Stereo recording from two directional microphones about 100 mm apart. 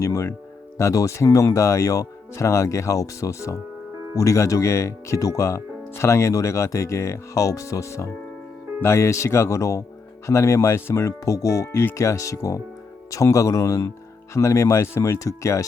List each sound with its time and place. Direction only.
0.0 s speech: 30° left (ahead or behind)